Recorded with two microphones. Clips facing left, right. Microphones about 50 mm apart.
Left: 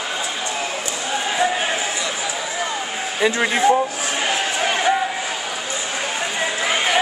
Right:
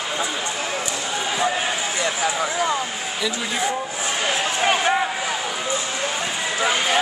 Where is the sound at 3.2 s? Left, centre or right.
Left.